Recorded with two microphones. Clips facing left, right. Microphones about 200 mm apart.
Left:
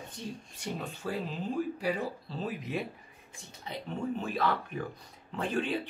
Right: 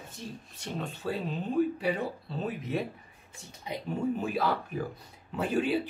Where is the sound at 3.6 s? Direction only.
15° right (ahead or behind).